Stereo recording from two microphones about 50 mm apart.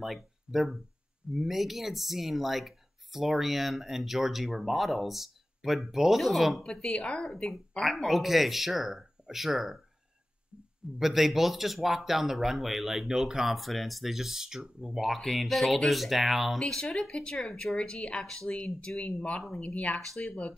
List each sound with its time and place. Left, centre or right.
0.0 s speech: centre
6.6 s speech: centre
7.8 s speech: centre
11.0 s speech: centre
16.5 s speech: centre
18.2 s speech: centre
18.5 s speech: left
19.6 s speech: left